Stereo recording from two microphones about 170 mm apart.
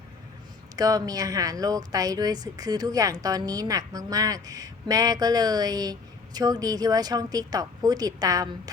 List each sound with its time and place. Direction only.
0.8 s speech: 20° right (ahead or behind)